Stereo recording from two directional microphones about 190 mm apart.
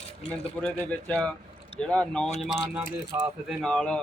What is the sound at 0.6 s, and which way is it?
Speech, 5° left (ahead or behind).